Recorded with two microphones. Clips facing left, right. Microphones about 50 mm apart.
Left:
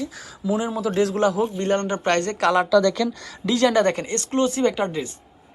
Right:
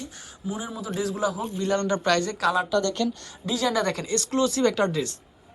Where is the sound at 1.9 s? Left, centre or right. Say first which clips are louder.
Left 1 dB; left.